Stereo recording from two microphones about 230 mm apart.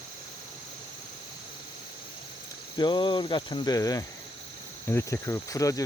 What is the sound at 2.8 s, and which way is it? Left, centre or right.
Cricket, centre.